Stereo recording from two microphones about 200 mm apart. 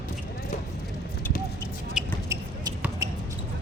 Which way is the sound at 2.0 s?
5° right (ahead or behind).